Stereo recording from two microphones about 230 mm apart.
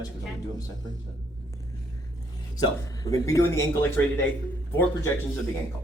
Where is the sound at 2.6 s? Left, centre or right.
Centre.